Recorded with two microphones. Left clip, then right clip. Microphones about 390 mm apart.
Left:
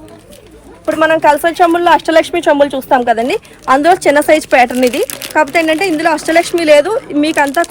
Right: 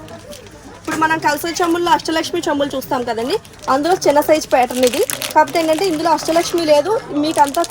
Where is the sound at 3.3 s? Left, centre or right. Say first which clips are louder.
Left 5 dB; left.